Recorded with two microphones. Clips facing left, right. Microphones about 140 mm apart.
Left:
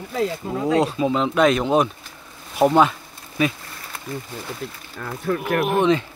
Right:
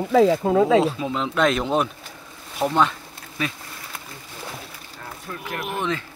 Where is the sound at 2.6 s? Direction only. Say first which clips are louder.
Left 7 dB; 35° left (ahead or behind).